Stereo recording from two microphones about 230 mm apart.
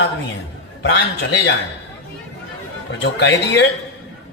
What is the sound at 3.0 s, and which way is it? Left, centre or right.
Speech, left.